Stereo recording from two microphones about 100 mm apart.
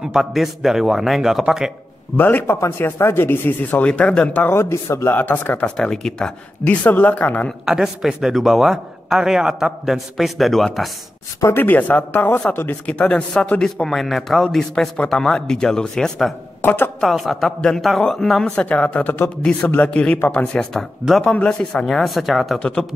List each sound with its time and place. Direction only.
0.0 s a man's voice: 5° right (ahead or behind)
2.1 s speech: 20° left (ahead or behind)
4.6 s speech: 30° left (ahead or behind)
7.6 s a man's voice: 5° right (ahead or behind)
11.4 s speech: 20° left (ahead or behind); by 16.3 s 5° left (ahead or behind)
16.6 s speech: 20° left (ahead or behind)
17.0 s a man's voice: centre (ahead or behind)
22.6 s speech: 10° left (ahead or behind)